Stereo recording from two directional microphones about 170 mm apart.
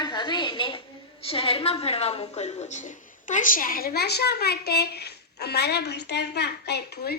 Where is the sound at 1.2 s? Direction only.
35° left (ahead or behind).